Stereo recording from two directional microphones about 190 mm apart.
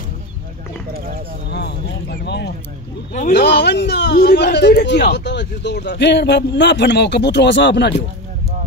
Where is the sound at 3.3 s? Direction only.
65° left (ahead or behind).